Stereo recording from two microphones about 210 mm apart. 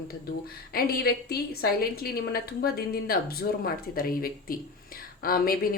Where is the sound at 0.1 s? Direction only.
45° left (ahead or behind).